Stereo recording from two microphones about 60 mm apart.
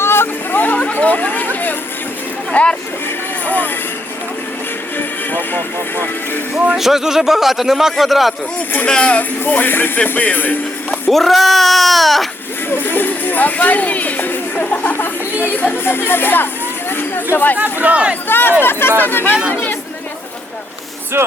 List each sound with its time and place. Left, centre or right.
0.0 s chatter: left
0.6 s chatter: left
2.5 s speech: left
4.9 s speech: left
6.7 s speech: centre
8.9 s speech: left
9.4 s speech: left
11.1 s speech: centre
12.7 s speech: left
14.9 s speech: left
17.6 s speech: right
18.3 s speech: left
21.2 s speech: right